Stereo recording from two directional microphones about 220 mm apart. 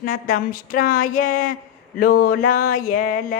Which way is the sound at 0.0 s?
40° left (ahead or behind).